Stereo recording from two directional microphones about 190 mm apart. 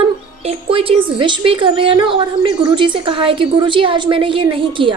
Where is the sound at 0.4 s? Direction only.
30° right (ahead or behind).